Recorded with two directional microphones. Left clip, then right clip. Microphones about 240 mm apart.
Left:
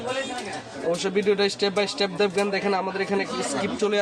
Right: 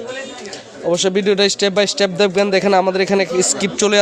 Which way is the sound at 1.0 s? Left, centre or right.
Right.